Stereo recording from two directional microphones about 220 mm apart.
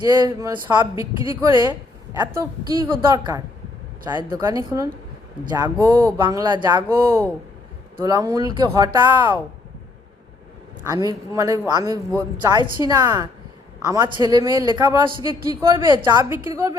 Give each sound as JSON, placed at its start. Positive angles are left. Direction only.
{"t": 0.1, "sound": "a man's voice", "side_deg": -15}
{"t": 10.8, "sound": "a man's voice", "side_deg": -15}